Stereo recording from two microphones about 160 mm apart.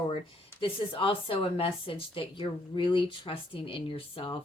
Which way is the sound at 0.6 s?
35° left (ahead or behind).